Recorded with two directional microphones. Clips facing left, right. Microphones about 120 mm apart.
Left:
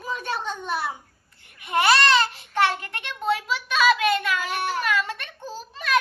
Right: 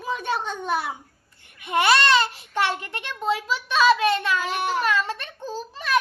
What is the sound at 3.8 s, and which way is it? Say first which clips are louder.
Speech: right 1 dB; 30° right (ahead or behind).